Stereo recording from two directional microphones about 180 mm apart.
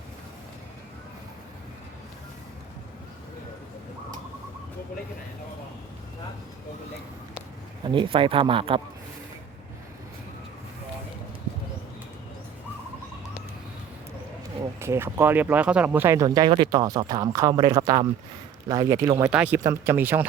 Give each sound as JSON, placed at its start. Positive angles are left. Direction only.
{"t": 7.9, "sound": "speech", "side_deg": -30}
{"t": 14.8, "sound": "speech", "side_deg": -15}